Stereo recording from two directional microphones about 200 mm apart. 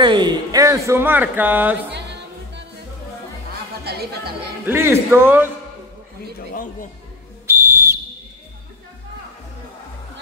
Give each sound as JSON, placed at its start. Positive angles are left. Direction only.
{"t": 0.0, "sound": "speech", "side_deg": -20}
{"t": 3.8, "sound": "speech", "side_deg": -50}
{"t": 4.6, "sound": "speech", "side_deg": -10}
{"t": 6.5, "sound": "speech", "side_deg": 45}
{"t": 7.4, "sound": "whistle", "side_deg": -15}